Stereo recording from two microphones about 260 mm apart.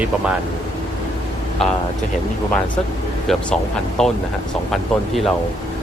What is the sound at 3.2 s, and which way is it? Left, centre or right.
Speech, centre.